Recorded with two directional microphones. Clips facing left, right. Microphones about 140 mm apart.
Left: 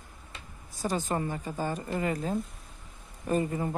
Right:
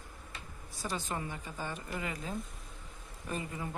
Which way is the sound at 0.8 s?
45° left (ahead or behind).